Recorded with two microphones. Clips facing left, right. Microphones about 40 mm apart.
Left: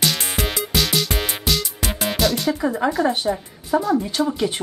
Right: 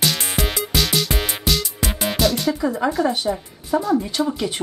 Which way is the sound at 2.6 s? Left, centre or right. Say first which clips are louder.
Left 1 dB; centre.